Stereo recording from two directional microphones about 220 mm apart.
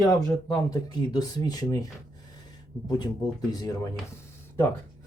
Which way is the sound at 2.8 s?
20° left (ahead or behind).